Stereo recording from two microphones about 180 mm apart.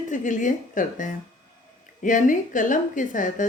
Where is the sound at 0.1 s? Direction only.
45° left (ahead or behind).